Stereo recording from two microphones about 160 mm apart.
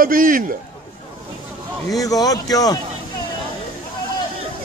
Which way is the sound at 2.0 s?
20° left (ahead or behind).